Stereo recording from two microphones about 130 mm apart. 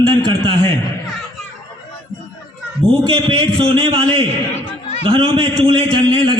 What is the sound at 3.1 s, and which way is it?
A man's voice, 40° right (ahead or behind).